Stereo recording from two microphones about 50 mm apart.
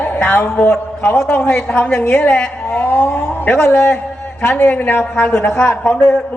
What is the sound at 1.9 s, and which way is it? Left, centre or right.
Speech, left.